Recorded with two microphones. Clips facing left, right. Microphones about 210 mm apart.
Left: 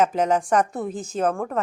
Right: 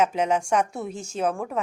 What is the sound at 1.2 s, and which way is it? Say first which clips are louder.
Speech: left 2 dB; 5° right (ahead or behind).